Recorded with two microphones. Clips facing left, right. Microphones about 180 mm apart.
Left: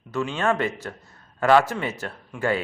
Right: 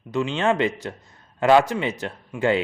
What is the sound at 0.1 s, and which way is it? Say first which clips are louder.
A man's voice: right 2 dB; 20° right (ahead or behind).